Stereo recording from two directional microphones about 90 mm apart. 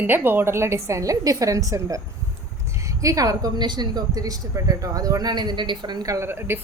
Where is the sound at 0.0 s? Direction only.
20° right (ahead or behind); by 6.1 s 55° right (ahead or behind).